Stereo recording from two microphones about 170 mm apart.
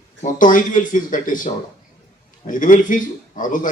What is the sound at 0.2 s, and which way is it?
A man's voice, 50° left (ahead or behind).